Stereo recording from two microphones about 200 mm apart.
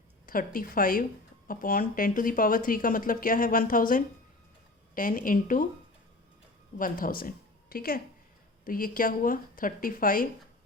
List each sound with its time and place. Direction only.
0.3 s a woman's voice: 45° left (ahead or behind)
6.7 s a woman's voice: 45° left (ahead or behind)